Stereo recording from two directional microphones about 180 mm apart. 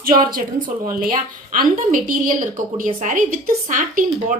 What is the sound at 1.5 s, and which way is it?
A woman's voice, 50° right (ahead or behind).